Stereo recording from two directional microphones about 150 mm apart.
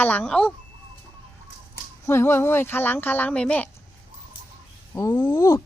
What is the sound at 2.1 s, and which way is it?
Speech, 15° left (ahead or behind).